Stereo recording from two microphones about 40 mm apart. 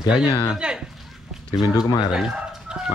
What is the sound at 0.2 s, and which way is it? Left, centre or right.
Speech, right.